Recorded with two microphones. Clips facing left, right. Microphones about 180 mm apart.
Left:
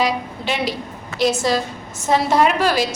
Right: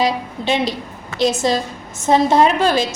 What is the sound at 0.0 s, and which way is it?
A woman's voice, 25° right (ahead or behind).